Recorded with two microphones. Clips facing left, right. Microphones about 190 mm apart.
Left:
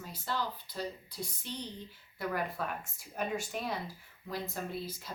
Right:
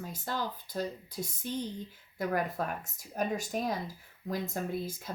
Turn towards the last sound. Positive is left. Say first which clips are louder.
# right 4 dB
turn(degrees=-50)  # may be behind; listen again after turning